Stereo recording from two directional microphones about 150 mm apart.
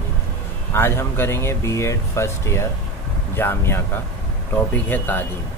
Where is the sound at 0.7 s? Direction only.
15° left (ahead or behind).